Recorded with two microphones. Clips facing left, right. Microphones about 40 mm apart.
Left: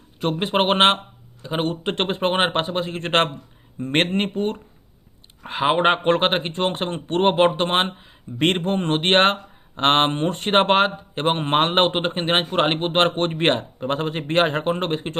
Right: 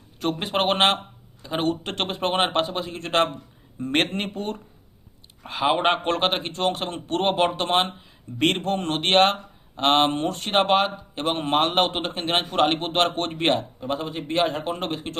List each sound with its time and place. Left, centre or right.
0.2 s speech: left